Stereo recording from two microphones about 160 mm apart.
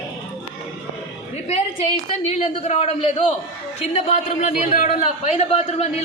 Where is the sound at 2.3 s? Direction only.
40° left (ahead or behind).